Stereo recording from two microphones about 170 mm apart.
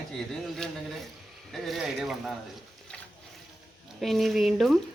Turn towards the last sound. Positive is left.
turn(degrees=0)  # may be behind; listen again after turning